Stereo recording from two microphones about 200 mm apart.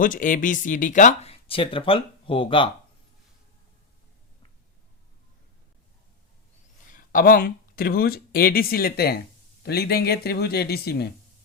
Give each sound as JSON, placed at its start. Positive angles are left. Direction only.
{"t": 0.0, "sound": "speech", "side_deg": 40}
{"t": 6.9, "sound": "speech", "side_deg": 45}